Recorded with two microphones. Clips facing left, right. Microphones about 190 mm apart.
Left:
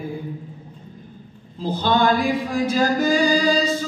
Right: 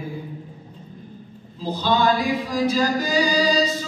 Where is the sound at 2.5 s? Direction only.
50° left (ahead or behind).